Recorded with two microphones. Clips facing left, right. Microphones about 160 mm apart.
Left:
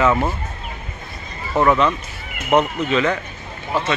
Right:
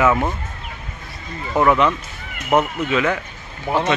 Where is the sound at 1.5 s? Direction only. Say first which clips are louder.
Even; 10° right (ahead or behind).